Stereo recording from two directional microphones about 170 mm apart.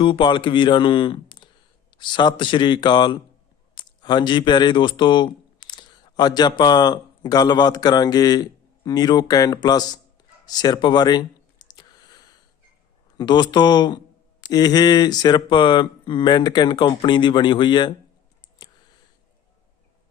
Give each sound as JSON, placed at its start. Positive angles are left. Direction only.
{"t": 0.0, "sound": "speech", "side_deg": 30}
{"t": 11.6, "sound": "a sound", "side_deg": 25}
{"t": 13.1, "sound": "speech", "side_deg": 25}